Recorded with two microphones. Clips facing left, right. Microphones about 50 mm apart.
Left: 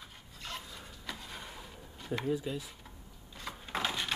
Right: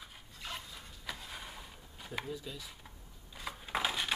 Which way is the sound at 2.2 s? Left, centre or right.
Left.